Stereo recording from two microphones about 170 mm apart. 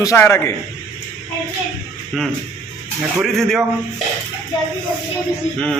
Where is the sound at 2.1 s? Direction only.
Centre (ahead or behind).